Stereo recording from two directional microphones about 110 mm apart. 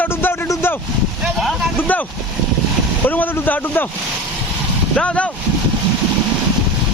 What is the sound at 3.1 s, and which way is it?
Speech, 15° left (ahead or behind).